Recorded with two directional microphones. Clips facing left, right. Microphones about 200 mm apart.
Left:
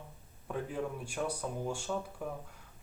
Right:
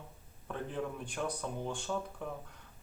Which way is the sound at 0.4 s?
10° left (ahead or behind).